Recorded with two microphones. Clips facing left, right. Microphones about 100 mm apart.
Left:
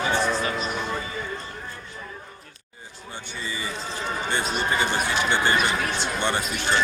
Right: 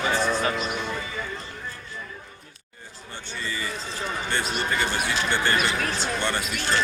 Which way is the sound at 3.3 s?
15° left (ahead or behind).